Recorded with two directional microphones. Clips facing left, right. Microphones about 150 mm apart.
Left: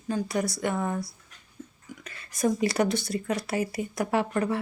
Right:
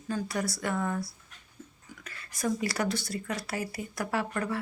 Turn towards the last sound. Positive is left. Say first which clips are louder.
# left 5 dB
turn(degrees=20)  # may be behind; listen again after turning